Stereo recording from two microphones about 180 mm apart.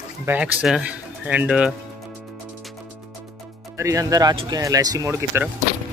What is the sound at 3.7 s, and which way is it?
Speech, 20° right (ahead or behind).